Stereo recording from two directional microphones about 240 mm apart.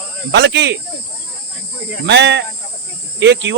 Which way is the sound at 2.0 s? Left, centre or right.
Right.